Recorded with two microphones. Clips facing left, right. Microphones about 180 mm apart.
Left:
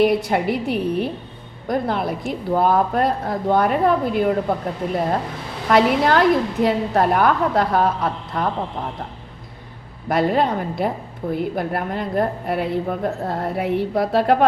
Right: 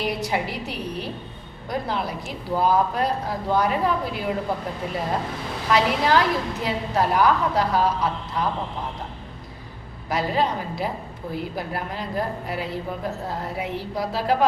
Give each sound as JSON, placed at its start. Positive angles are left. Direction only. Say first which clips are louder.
{"t": 0.0, "sound": "a woman's voice", "louder": "left 8 dB", "side_deg": 55}
{"t": 5.7, "sound": "a woman's voice", "louder": "left 4 dB", "side_deg": 55}
{"t": 10.1, "sound": "a woman's voice", "louder": "left 5 dB", "side_deg": 55}